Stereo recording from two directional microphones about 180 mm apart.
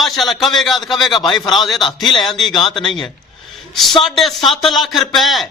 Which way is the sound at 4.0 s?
Centre (ahead or behind).